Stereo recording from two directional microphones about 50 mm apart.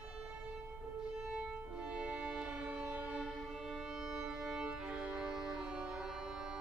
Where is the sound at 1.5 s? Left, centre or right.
Right.